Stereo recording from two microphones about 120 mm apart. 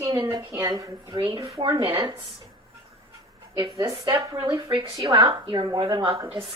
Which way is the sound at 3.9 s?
45° right (ahead or behind).